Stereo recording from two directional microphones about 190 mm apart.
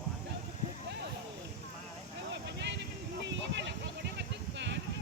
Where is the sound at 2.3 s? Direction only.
65° right (ahead or behind).